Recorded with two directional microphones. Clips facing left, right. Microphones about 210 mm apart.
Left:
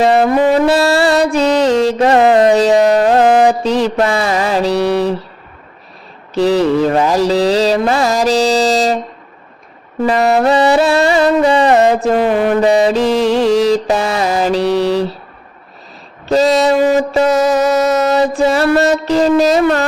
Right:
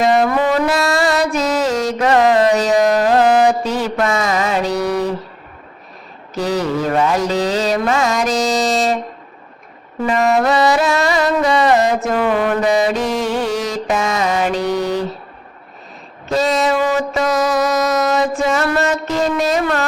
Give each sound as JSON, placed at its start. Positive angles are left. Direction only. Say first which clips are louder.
{"t": 0.0, "sound": "music", "louder": "left 4 dB", "side_deg": 30}
{"t": 6.3, "sound": "mantra", "louder": "left 7 dB", "side_deg": 30}
{"t": 10.1, "sound": "music", "louder": "left 3 dB", "side_deg": 35}
{"t": 13.6, "sound": "mantra", "louder": "left 7 dB", "side_deg": 30}
{"t": 16.3, "sound": "a sound", "louder": "left 5 dB", "side_deg": 35}